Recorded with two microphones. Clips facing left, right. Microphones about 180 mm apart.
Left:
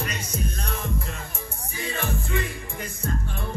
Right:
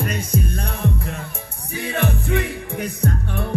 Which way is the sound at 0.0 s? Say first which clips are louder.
Right 7 dB; 55° right (ahead or behind).